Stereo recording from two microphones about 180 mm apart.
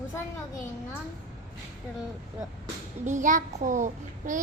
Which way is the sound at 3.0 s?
45° right (ahead or behind).